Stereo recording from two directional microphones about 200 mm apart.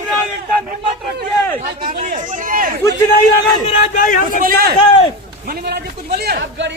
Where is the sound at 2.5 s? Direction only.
45° right (ahead or behind).